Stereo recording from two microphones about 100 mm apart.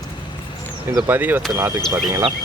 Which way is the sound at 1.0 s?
20° right (ahead or behind).